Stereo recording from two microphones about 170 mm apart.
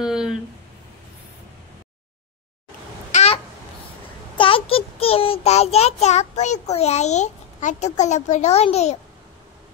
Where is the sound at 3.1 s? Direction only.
40° left (ahead or behind).